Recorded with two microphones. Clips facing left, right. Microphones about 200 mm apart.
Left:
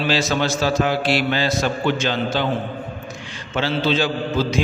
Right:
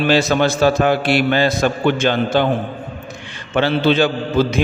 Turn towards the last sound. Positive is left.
turn(degrees=-60)  # may be behind; listen again after turning